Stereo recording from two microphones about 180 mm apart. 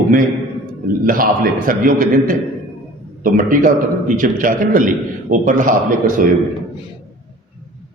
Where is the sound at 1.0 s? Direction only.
50° right (ahead or behind).